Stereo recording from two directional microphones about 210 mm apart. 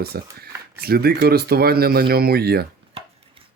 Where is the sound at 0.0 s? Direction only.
50° right (ahead or behind).